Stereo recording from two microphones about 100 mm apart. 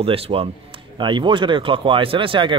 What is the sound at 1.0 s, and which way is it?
Speech, 50° right (ahead or behind).